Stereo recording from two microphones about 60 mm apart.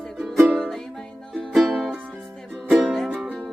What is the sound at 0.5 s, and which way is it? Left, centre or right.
Music, centre.